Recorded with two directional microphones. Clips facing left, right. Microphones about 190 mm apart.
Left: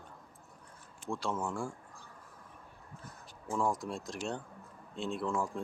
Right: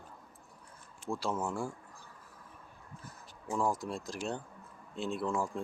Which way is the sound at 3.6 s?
Centre (ahead or behind).